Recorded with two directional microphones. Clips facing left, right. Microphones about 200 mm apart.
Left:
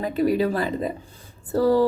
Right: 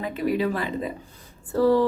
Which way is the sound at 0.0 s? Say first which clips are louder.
Left 3 dB; 40° left (ahead or behind).